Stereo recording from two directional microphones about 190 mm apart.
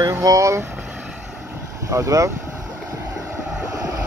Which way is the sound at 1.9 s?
15° right (ahead or behind).